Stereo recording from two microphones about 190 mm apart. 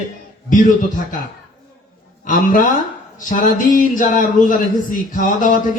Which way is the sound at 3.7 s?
45° left (ahead or behind).